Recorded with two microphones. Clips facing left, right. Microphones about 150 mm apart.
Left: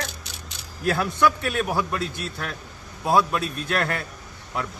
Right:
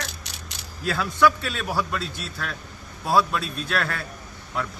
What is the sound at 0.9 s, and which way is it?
A man's voice, 20° left (ahead or behind).